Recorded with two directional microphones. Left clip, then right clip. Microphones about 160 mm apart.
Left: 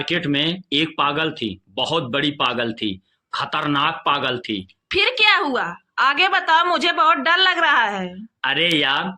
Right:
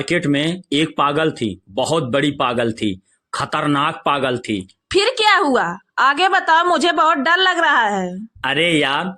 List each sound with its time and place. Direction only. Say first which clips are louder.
0.0 s a woman's voice: right 2 dB; 45° right (ahead or behind)